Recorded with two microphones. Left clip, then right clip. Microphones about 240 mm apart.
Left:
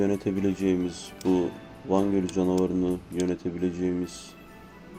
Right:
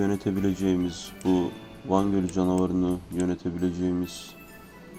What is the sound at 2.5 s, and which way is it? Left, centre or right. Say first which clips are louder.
Speech: left 1 dB; right.